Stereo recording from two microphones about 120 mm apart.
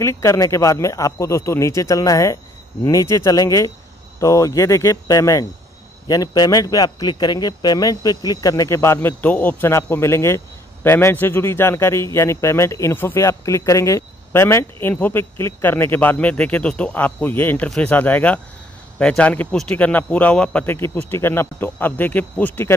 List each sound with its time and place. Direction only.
0.0 s speech: 25° left (ahead or behind)